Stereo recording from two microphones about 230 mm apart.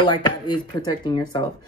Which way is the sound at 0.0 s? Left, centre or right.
Centre.